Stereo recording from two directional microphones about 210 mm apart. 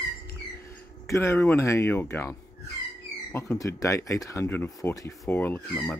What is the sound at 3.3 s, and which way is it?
Speech, 15° left (ahead or behind).